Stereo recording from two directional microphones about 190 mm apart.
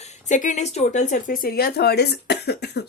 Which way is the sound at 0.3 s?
40° left (ahead or behind).